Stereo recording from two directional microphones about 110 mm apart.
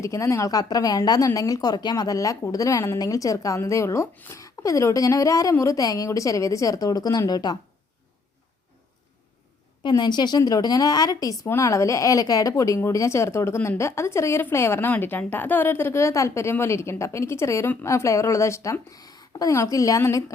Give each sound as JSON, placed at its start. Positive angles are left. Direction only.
{"t": 0.0, "sound": "a woman's voice", "side_deg": 30}
{"t": 4.1, "sound": "speech", "side_deg": 15}
{"t": 4.4, "sound": "a woman's voice", "side_deg": 30}
{"t": 9.8, "sound": "a woman's voice", "side_deg": 40}